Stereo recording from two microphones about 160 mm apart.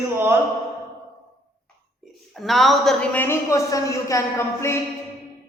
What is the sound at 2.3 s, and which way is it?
A woman's voice, centre (ahead or behind).